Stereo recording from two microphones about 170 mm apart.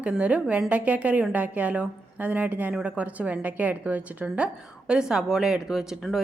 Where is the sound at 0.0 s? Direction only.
5° right (ahead or behind).